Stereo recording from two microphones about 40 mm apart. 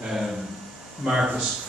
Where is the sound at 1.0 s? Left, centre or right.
Centre.